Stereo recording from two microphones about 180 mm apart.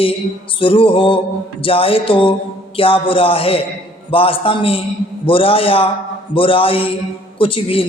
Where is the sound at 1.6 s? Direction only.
30° left (ahead or behind).